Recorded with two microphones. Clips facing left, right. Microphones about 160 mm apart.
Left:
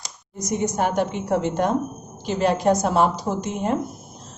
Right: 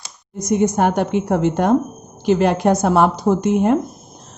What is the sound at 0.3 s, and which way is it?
A woman's voice, 60° right (ahead or behind).